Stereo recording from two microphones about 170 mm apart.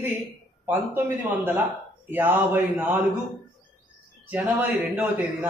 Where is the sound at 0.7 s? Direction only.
10° right (ahead or behind).